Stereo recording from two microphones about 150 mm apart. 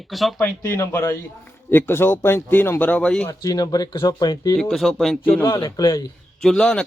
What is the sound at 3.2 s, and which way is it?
Speech, 25° left (ahead or behind).